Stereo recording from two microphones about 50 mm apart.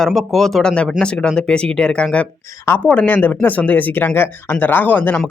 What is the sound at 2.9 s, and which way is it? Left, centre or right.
Speech, left.